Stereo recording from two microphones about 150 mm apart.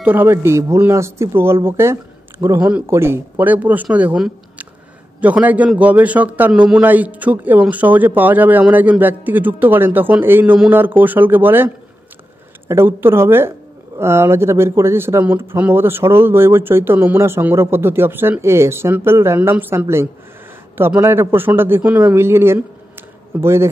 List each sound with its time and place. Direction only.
0.0 s a man's voice: 15° right (ahead or behind)